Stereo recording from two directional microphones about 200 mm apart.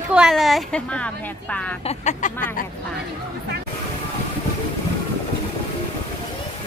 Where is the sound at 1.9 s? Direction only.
35° left (ahead or behind).